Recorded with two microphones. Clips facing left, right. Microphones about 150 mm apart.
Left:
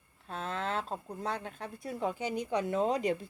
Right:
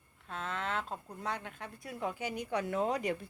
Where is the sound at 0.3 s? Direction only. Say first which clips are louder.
Left 2 dB; 35° left (ahead or behind).